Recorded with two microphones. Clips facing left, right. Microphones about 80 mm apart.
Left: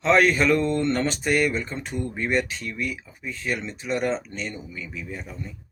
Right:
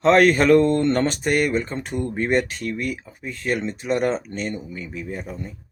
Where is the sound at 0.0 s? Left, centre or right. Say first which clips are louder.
Right 4 dB; right.